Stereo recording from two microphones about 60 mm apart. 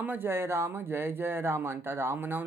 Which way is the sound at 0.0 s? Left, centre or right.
Right.